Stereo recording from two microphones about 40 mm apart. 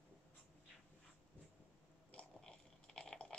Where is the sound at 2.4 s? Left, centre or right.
Centre.